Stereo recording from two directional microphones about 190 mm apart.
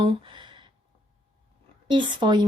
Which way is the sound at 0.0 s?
25° right (ahead or behind).